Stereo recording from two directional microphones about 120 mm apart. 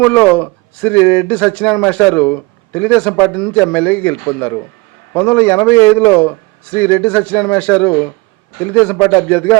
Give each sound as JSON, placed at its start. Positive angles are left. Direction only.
{"t": 0.0, "sound": "speech", "side_deg": 15}